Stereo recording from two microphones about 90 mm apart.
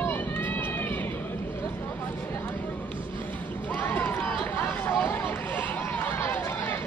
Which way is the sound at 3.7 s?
20° left (ahead or behind).